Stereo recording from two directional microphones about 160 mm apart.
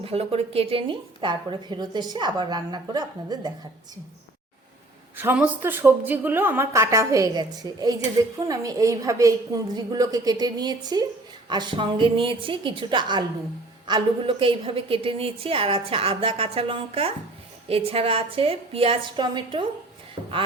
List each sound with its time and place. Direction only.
0.0 s a woman's voice: 35° right (ahead or behind)
5.1 s a woman's voice: 10° right (ahead or behind); by 19.6 s 30° right (ahead or behind)